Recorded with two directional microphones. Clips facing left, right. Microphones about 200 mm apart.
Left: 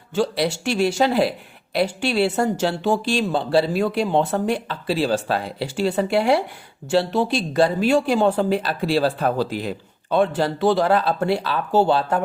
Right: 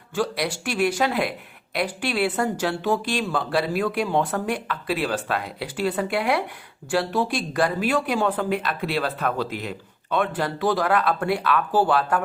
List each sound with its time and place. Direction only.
0.1 s speech: 25° left (ahead or behind)